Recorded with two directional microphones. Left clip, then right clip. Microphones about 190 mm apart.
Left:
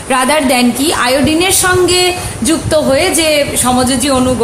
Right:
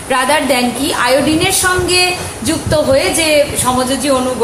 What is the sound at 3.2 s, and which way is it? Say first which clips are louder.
Speech: even; 50° left (ahead or behind).